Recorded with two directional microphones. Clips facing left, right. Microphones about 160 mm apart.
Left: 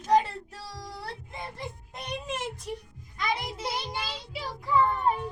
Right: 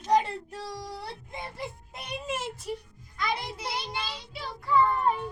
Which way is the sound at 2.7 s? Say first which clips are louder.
Right 1 dB; 20° left (ahead or behind).